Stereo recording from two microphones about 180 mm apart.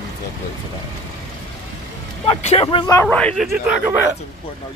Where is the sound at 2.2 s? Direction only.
35° left (ahead or behind).